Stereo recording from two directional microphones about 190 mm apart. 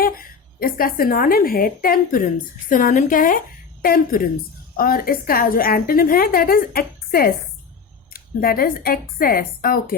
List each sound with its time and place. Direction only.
0.0 s a woman's voice: 50° left (ahead or behind)